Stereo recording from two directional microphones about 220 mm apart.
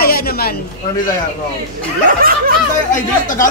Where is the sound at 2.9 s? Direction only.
35° left (ahead or behind).